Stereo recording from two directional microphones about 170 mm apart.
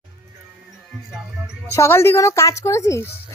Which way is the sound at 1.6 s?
15° left (ahead or behind).